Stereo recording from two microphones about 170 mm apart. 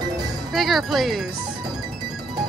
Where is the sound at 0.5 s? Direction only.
Centre (ahead or behind).